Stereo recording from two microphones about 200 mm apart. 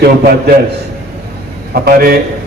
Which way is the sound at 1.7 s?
50° right (ahead or behind).